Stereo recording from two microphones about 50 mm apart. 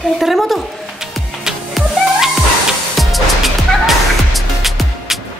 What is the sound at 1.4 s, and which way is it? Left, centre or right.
Music, centre.